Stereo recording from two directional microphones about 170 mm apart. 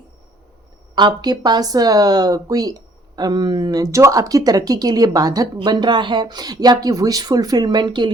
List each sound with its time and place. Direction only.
0.9 s speech: 25° right (ahead or behind)